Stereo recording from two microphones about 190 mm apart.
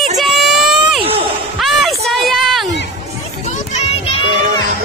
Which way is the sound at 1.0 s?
30° right (ahead or behind).